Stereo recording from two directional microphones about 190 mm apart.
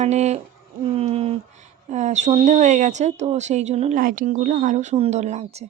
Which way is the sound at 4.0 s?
45° right (ahead or behind).